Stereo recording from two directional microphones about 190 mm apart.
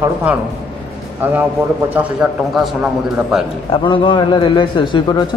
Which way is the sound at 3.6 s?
25° left (ahead or behind).